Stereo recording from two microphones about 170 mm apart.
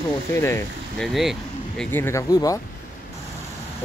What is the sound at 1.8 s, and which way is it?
Speech, 15° left (ahead or behind).